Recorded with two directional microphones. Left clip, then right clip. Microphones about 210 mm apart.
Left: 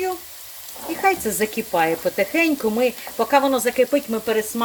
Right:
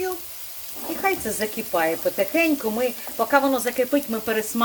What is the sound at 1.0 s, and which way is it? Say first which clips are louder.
Speech: left 5 dB; 25° left (ahead or behind).